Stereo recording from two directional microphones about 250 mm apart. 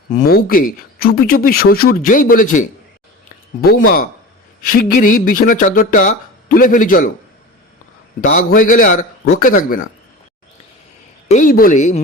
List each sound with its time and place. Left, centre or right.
0.1 s speech: left
8.5 s speech: left
11.3 s speech: left